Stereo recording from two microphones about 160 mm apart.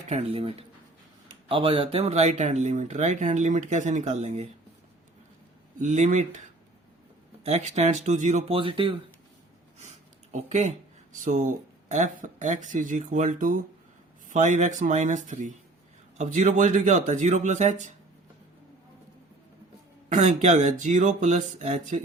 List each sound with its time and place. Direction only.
0.1 s speech: 35° right (ahead or behind)
5.8 s speech: 50° right (ahead or behind)
7.4 s speech: 45° right (ahead or behind)
9.7 s speech: 45° right (ahead or behind)
20.1 s speech: 50° right (ahead or behind)